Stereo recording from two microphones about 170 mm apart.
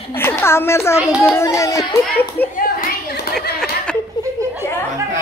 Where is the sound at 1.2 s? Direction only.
15° left (ahead or behind).